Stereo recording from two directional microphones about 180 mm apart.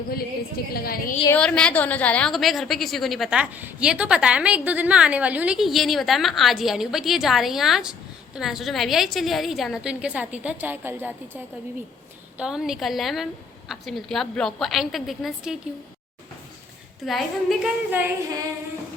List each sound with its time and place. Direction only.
0.7 s a woman's voice: 55° left (ahead or behind)
1.3 s a woman's voice: 5° left (ahead or behind)
17.1 s a woman's voice: centre (ahead or behind)